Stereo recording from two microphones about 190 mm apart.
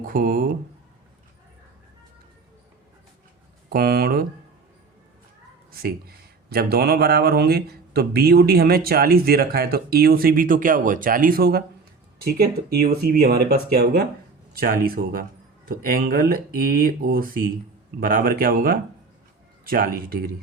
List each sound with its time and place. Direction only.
0.0 s speech: 45° right (ahead or behind)
3.7 s speech: 55° right (ahead or behind)
5.7 s speech: 55° right (ahead or behind)